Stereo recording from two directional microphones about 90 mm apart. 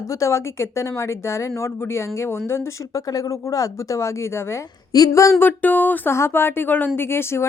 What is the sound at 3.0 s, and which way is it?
A woman's voice, 40° left (ahead or behind).